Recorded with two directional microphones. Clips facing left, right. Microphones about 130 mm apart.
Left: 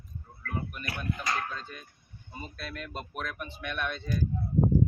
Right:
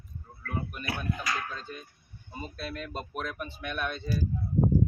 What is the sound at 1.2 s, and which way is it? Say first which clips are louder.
Speech: left 1 dB; 25° left (ahead or behind).